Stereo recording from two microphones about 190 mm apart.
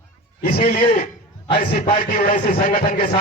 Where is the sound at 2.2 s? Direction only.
50° left (ahead or behind).